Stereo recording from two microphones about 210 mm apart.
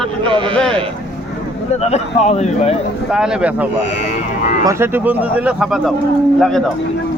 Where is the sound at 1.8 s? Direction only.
30° left (ahead or behind).